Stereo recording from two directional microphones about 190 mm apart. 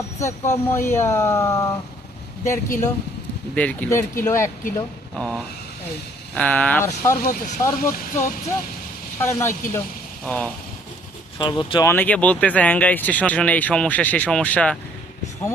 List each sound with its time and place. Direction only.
0.2 s speech: 15° left (ahead or behind)
5.1 s speech: 5° left (ahead or behind)
7.2 s speech: 50° left (ahead or behind)
9.1 s speech: 15° left (ahead or behind)
11.3 s speech: 25° left (ahead or behind)
11.9 s speech: 10° left (ahead or behind)